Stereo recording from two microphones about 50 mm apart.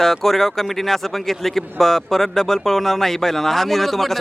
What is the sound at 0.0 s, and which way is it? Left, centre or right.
Speech, centre.